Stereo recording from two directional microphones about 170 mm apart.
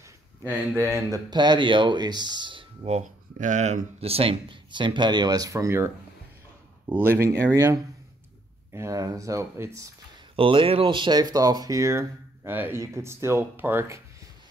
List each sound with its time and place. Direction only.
0.4 s speech: 10° right (ahead or behind)
10.3 s speech: 30° right (ahead or behind); by 14.0 s 15° right (ahead or behind)